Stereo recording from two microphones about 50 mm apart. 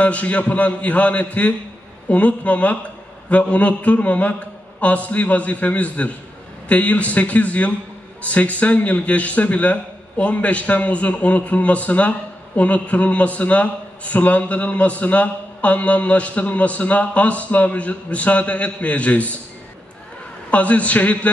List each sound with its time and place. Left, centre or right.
0.0 s a man's voice: left
20.5 s a man's voice: left